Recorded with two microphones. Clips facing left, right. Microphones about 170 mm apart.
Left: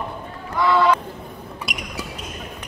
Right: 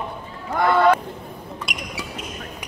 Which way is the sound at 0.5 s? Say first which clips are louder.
Right 1 dB; 50° right (ahead or behind).